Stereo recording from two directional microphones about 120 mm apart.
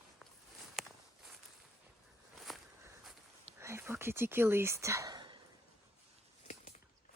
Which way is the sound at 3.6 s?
20° right (ahead or behind).